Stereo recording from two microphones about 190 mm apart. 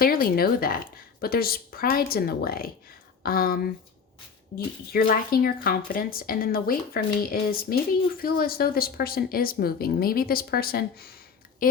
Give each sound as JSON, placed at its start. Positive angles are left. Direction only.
{"t": 0.0, "sound": "speech", "side_deg": 50}